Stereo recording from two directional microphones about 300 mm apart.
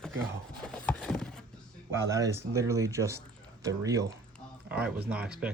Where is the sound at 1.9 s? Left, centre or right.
Centre.